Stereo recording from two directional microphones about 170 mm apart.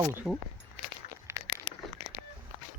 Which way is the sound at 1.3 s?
15° right (ahead or behind).